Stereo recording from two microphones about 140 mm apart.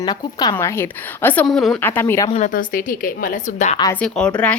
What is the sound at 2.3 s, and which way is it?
A woman's voice, 70° left (ahead or behind).